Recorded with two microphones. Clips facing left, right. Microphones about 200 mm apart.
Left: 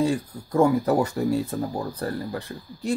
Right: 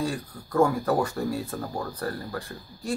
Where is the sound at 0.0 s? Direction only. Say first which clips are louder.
Left 6 dB; 20° left (ahead or behind).